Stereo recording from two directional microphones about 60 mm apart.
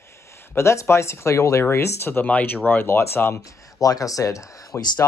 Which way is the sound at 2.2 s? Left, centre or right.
Left.